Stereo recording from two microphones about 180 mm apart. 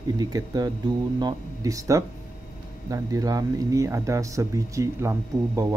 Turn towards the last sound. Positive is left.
turn(degrees=-15)  # may be behind; listen again after turning